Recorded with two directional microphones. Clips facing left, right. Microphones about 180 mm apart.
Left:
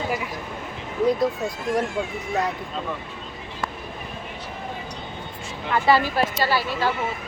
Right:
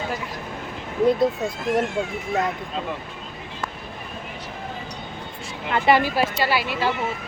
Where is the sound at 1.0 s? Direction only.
25° right (ahead or behind).